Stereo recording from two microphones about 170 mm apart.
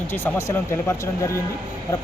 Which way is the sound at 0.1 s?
15° left (ahead or behind).